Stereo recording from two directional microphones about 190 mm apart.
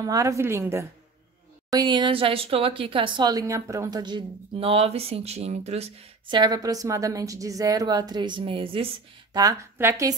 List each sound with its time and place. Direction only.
0.0 s a woman's voice: 20° right (ahead or behind)
9.3 s a woman's voice: 20° right (ahead or behind)